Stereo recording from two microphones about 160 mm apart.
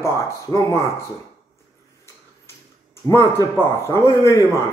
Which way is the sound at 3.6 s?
15° left (ahead or behind).